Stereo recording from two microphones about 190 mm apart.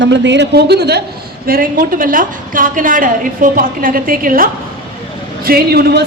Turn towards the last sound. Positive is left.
turn(degrees=-60)  # may be behind; listen again after turning